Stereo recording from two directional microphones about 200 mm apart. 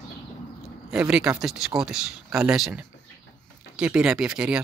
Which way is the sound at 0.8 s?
5° right (ahead or behind).